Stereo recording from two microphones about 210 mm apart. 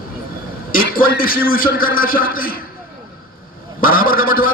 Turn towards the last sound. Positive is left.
turn(degrees=40)  # may be behind; listen again after turning